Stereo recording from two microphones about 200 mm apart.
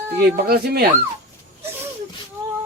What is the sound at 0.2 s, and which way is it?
Speech, 50° right (ahead or behind).